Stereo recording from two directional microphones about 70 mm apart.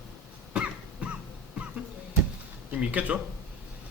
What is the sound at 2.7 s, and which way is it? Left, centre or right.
Speech, centre.